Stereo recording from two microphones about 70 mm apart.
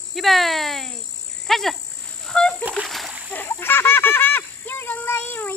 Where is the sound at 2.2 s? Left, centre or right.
Centre.